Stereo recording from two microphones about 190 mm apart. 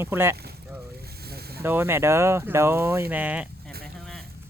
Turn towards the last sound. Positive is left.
turn(degrees=-10)  # may be behind; listen again after turning